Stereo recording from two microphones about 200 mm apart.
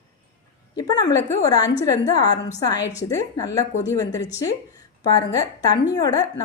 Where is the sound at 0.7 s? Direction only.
20° left (ahead or behind).